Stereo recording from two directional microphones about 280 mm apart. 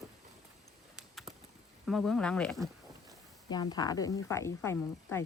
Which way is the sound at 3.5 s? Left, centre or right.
Centre.